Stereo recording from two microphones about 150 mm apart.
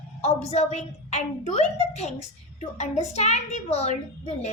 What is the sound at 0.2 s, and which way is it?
A woman's voice, 45° left (ahead or behind).